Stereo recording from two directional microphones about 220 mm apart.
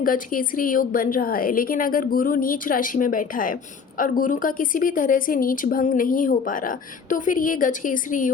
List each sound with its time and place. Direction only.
0.0 s a woman's voice: 40° left (ahead or behind)